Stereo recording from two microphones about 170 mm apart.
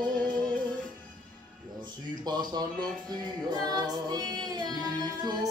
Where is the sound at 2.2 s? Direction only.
25° right (ahead or behind).